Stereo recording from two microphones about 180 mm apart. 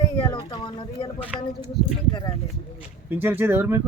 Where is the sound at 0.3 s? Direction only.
20° left (ahead or behind).